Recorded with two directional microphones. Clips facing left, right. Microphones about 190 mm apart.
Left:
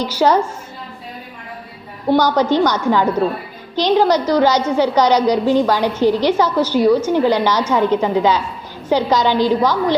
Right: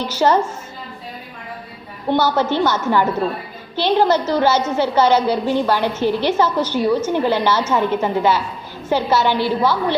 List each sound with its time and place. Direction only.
0.0 s a woman's voice: 10° left (ahead or behind)
2.0 s a woman's voice: 15° left (ahead or behind)